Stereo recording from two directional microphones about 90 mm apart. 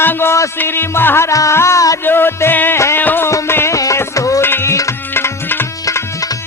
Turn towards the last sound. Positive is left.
turn(degrees=40)  # may be behind; listen again after turning